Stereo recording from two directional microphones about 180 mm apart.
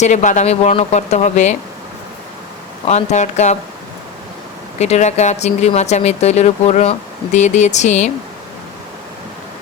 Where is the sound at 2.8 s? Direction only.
40° left (ahead or behind).